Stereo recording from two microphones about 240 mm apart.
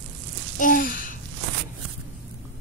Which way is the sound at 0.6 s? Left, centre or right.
Left.